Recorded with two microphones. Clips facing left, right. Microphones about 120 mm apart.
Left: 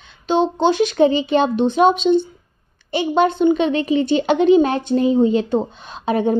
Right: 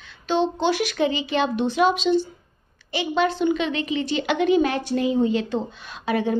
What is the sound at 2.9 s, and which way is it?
A woman's voice, 30° left (ahead or behind).